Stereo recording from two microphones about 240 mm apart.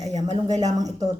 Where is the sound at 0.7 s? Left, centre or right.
Centre.